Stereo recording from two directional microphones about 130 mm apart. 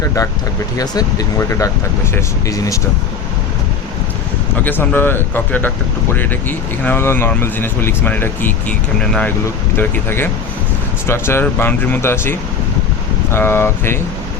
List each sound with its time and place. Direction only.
0.8 s speech: 25° left (ahead or behind)
4.6 s speech: 15° left (ahead or behind)